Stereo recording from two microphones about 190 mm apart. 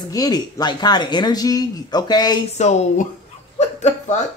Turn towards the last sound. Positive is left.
turn(degrees=35)  # may be behind; listen again after turning